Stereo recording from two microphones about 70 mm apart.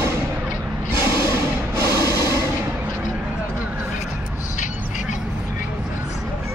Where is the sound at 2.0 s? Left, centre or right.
Left.